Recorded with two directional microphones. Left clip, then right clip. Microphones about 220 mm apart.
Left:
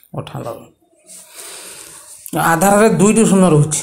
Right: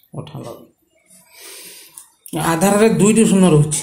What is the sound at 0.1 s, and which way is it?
Speech, 15° left (ahead or behind).